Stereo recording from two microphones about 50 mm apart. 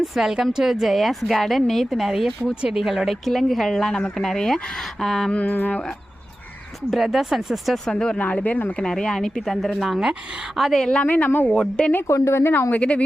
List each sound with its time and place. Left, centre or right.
0.0 s a woman's voice: centre
5.3 s speech: left
6.9 s speech: centre
7.9 s speech: centre
8.4 s speech: left
8.8 s speech: centre
11.0 s speech: left
12.0 s a woman's voice: left
12.7 s a woman's voice: left